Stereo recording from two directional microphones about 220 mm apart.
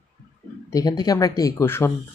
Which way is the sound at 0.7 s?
15° left (ahead or behind).